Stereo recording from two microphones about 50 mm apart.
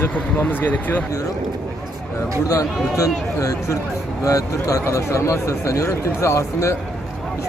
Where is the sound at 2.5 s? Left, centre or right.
Left.